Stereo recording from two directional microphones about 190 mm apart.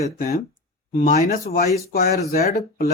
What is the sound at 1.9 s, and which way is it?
Speech, 55° left (ahead or behind).